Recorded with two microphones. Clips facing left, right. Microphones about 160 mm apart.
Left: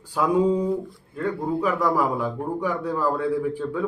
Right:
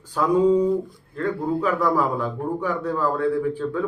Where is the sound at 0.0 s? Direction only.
10° left (ahead or behind).